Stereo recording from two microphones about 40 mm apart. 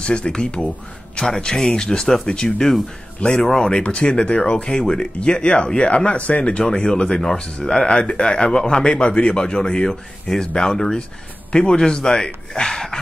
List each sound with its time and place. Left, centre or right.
0.0 s a man's voice: left
6.6 s a man's voice: centre